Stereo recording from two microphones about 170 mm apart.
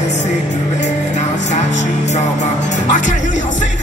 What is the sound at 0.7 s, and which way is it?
Music, 45° left (ahead or behind).